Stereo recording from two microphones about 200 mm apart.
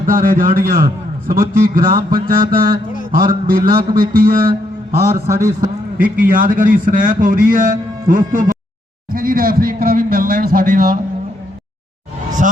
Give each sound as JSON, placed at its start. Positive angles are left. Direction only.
{"t": 0.0, "sound": "a man's voice", "side_deg": -45}
{"t": 5.0, "sound": "a man's voice", "side_deg": -15}
{"t": 6.0, "sound": "speech", "side_deg": -45}
{"t": 12.4, "sound": "speech", "side_deg": -40}